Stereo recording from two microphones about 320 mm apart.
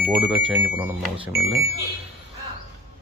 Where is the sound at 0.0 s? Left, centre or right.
Centre.